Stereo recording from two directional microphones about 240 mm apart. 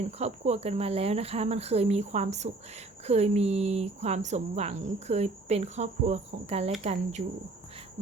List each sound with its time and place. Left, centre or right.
0.0 s speech: right